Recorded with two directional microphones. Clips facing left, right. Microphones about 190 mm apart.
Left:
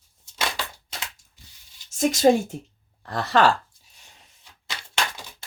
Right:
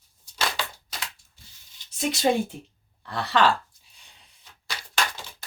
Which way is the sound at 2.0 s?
45° left (ahead or behind).